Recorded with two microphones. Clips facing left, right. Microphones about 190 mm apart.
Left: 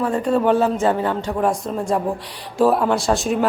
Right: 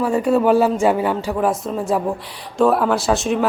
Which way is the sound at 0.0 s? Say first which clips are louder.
Right 2 dB; 10° right (ahead or behind).